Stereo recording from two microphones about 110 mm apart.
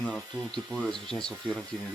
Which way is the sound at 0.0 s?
5° left (ahead or behind).